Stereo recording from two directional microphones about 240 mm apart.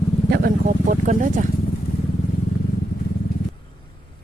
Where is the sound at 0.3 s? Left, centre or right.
Right.